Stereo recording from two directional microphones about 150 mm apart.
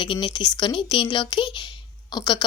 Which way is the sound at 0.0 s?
30° left (ahead or behind).